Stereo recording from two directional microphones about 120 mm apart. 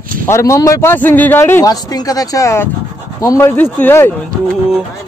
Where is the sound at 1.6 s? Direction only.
30° left (ahead or behind).